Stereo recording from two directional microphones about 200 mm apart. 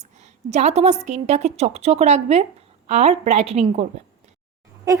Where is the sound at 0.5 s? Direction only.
35° right (ahead or behind).